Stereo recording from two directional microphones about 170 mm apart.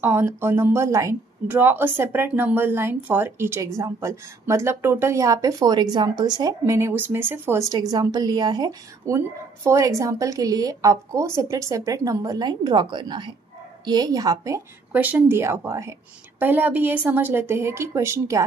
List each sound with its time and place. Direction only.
0.0 s a woman's voice: 15° right (ahead or behind)